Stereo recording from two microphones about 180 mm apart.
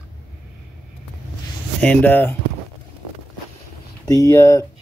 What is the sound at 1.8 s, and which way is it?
Speech, 10° left (ahead or behind).